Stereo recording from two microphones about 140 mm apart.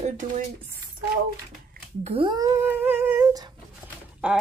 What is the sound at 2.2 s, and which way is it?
Humming, 25° right (ahead or behind).